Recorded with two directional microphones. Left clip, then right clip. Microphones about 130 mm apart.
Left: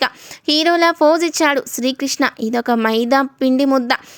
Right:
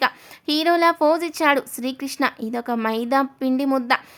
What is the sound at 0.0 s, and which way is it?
A woman's voice, 25° left (ahead or behind).